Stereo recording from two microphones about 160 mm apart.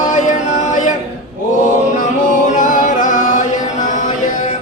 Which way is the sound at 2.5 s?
55° left (ahead or behind).